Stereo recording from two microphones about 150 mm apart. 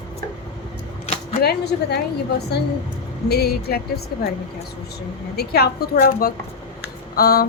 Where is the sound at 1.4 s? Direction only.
90° left.